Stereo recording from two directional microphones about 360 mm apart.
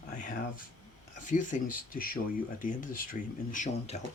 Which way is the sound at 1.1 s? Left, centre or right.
Left.